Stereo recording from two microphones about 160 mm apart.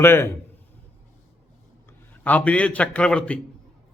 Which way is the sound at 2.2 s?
10° left (ahead or behind).